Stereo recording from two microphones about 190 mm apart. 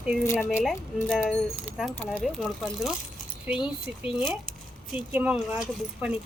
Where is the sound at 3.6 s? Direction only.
25° left (ahead or behind).